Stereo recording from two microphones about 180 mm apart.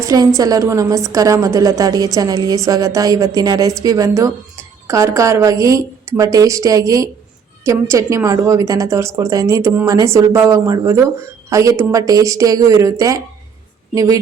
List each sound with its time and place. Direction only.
0.0 s a woman's voice: 20° right (ahead or behind)